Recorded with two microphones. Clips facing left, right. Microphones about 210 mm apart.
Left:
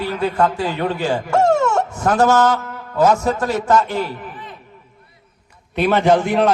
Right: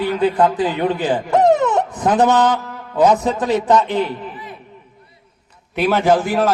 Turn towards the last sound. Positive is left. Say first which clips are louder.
# left 1 dB
turn(degrees=0)  # may be behind; listen again after turning